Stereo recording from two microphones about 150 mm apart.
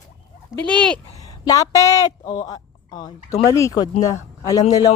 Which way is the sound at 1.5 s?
20° left (ahead or behind).